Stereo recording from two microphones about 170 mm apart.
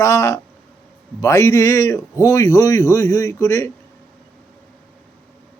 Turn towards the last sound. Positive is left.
turn(degrees=20)  # may be behind; listen again after turning